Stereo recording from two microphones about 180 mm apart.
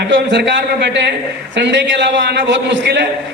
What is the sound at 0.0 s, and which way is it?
A man's voice, 85° right.